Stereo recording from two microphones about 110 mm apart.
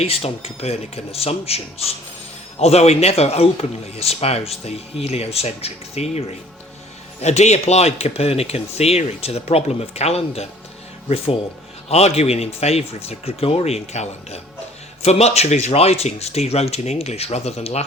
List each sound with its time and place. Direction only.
0.0 s a man's voice: 65° left (ahead or behind)
7.2 s a man's voice: 85° left; by 10.4 s 70° left (ahead or behind)
11.9 s a man's voice: 75° left (ahead or behind)